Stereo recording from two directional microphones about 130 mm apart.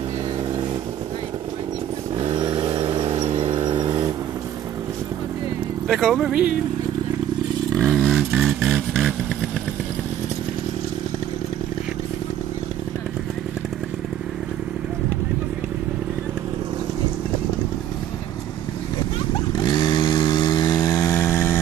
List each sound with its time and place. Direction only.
2.1 s vehicle: 40° right (ahead or behind)
5.9 s speech: centre (ahead or behind)
7.7 s a sound: 5° left (ahead or behind)
19.5 s vehicle: 30° left (ahead or behind)